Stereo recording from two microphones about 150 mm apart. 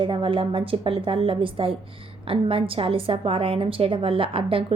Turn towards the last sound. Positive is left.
turn(degrees=-35)  # may be behind; listen again after turning